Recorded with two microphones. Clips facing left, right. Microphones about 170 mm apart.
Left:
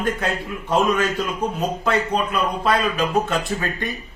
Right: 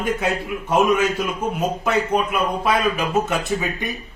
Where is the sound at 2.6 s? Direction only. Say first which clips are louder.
Left 1 dB; 10° right (ahead or behind).